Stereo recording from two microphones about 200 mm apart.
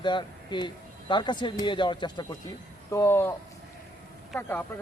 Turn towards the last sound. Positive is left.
turn(degrees=10)  # may be behind; listen again after turning